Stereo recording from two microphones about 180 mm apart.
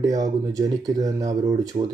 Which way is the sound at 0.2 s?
20° right (ahead or behind).